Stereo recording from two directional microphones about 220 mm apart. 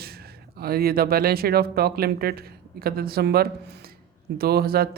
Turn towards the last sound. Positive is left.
turn(degrees=-45)  # may be behind; listen again after turning